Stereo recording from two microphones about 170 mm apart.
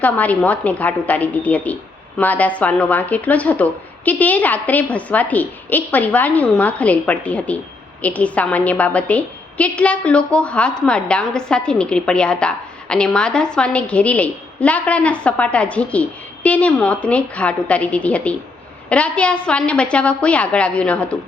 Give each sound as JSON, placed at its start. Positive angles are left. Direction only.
{"t": 0.0, "sound": "a woman's voice", "side_deg": 10}